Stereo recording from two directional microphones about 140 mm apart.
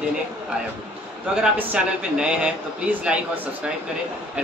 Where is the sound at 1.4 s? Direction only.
5° right (ahead or behind).